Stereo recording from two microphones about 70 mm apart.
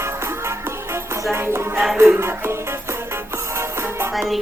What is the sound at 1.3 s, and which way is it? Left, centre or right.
Music, right.